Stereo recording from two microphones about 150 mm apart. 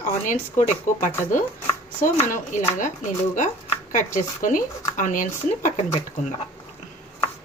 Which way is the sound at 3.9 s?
60° left (ahead or behind).